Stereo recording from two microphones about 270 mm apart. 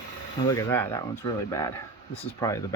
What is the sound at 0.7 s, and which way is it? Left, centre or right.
Speech, centre.